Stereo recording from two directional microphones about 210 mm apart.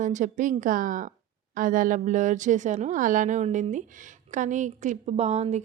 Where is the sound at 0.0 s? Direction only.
35° right (ahead or behind).